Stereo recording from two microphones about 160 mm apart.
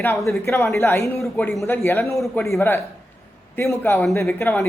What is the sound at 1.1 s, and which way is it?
Speech, centre (ahead or behind).